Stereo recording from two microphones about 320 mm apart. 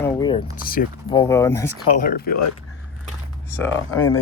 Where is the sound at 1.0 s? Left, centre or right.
Centre.